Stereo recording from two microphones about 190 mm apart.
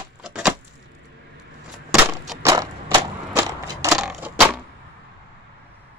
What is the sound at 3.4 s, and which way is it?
Crushing, 15° right (ahead or behind).